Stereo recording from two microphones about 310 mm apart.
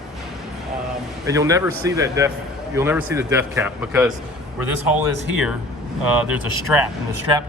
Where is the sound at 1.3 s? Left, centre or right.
Centre.